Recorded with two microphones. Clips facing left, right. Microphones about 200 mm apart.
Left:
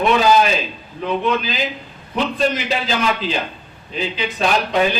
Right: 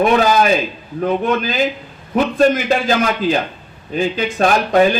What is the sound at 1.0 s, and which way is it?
A man's voice, 50° right (ahead or behind).